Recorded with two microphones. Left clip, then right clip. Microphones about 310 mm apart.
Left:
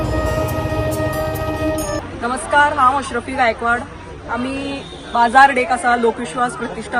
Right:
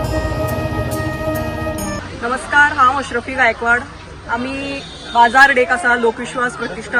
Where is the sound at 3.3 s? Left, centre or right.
Centre.